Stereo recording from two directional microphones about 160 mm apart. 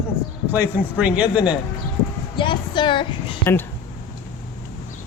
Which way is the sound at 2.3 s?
30° left (ahead or behind).